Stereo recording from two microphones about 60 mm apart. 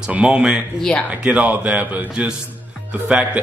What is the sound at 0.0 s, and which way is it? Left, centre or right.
A man's voice, centre.